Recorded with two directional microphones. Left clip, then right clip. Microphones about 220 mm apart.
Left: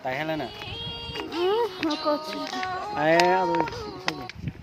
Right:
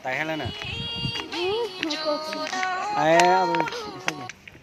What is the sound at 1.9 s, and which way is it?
Speech, 20° right (ahead or behind).